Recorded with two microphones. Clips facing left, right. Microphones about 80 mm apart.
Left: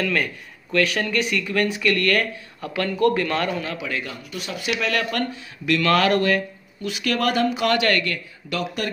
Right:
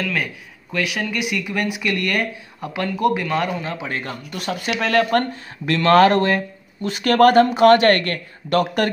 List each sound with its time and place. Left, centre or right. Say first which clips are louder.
0.0 s speech: left 1 dB; centre
3.6 s speech: right 2 dB; right